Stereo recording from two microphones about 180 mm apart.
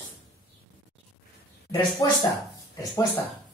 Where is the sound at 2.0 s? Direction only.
20° left (ahead or behind).